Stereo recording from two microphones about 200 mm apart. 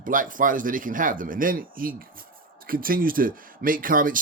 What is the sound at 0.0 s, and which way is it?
Speech, 40° right (ahead or behind).